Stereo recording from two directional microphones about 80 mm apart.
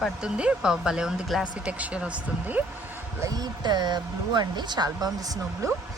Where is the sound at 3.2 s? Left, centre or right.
Right.